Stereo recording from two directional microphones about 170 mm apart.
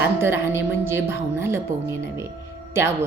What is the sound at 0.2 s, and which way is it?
A woman's voice, 15° right (ahead or behind).